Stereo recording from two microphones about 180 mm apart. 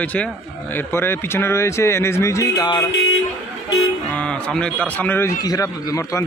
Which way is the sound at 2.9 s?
70° left (ahead or behind).